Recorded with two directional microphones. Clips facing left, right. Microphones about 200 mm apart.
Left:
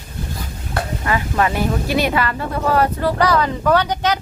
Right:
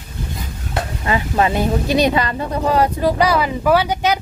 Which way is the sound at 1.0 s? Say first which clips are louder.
Right 2 dB; 20° right (ahead or behind).